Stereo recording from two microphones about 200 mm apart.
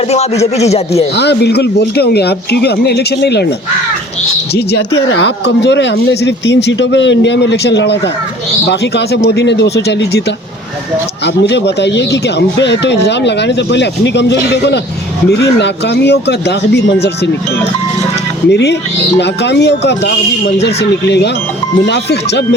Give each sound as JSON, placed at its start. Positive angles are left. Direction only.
{"t": 0.6, "sound": "a man's voice", "side_deg": 30}
{"t": 1.1, "sound": "speech", "side_deg": 55}
{"t": 4.5, "sound": "speech", "side_deg": 55}
{"t": 11.4, "sound": "speech", "side_deg": 60}
{"t": 18.4, "sound": "speech", "side_deg": 60}